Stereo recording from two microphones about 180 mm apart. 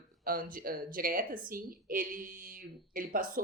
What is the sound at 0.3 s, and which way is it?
A woman's voice, 50° right (ahead or behind).